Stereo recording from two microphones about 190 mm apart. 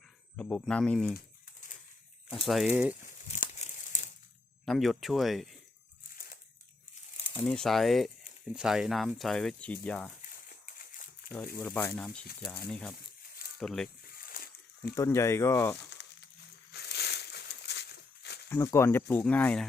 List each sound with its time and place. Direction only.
0.3 s speech: 5° left (ahead or behind)
2.5 s speech: 5° right (ahead or behind)
3.2 s crumpling: 40° left (ahead or behind)
4.6 s speech: centre (ahead or behind)
7.3 s speech: 5° left (ahead or behind)
11.5 s speech: 10° left (ahead or behind)
14.1 s a sound: 50° left (ahead or behind)
14.9 s speech: 15° left (ahead or behind)
16.7 s a sound: 60° left (ahead or behind)
18.4 s speech: 10° left (ahead or behind)